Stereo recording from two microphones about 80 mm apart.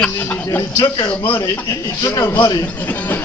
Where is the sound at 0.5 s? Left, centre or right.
Left.